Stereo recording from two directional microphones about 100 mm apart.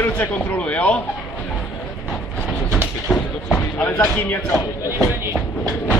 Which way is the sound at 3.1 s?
Centre (ahead or behind).